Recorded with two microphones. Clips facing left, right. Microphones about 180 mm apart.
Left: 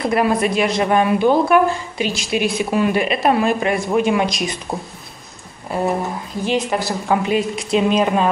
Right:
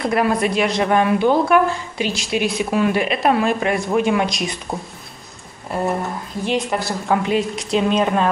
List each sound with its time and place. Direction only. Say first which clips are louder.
0.0 s a woman's voice: left 1 dB; 5° left (ahead or behind)